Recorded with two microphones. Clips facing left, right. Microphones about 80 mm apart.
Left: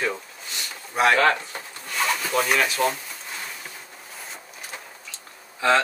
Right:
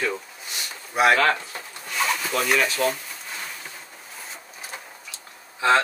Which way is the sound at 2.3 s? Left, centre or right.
Centre.